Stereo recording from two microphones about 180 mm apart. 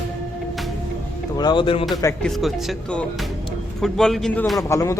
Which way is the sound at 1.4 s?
25° left (ahead or behind).